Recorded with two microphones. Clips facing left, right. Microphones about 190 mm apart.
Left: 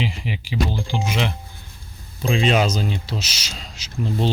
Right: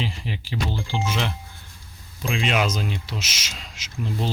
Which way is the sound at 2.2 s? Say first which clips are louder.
Left 5 dB; 35° left (ahead or behind).